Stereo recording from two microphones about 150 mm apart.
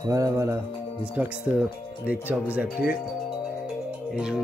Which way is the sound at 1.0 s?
10° right (ahead or behind).